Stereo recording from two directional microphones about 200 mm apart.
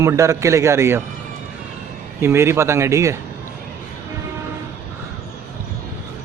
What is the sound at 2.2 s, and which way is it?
Speech, 10° right (ahead or behind).